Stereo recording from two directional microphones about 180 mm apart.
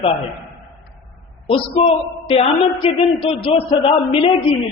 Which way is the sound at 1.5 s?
30° left (ahead or behind).